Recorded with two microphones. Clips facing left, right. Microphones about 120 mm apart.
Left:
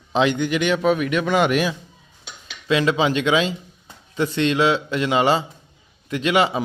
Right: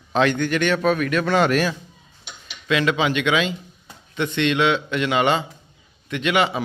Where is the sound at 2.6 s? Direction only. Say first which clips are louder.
Left 1 dB; 30° left (ahead or behind).